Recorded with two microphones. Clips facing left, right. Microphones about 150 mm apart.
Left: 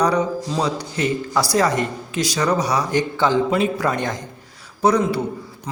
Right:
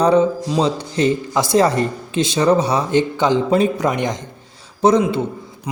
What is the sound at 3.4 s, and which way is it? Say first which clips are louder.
Speech: right 4 dB; 35° right (ahead or behind).